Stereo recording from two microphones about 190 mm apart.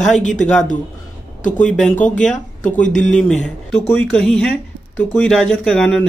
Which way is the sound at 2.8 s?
40° left (ahead or behind).